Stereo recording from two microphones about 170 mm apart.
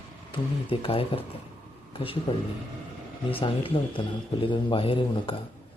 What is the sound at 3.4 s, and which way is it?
A man's voice, 30° left (ahead or behind).